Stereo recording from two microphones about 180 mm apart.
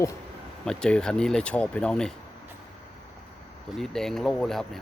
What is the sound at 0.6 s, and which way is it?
Speech, 5° left (ahead or behind).